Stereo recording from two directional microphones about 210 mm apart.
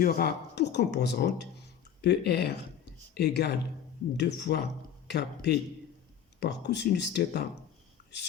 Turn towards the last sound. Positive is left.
turn(degrees=50)  # may be behind; listen again after turning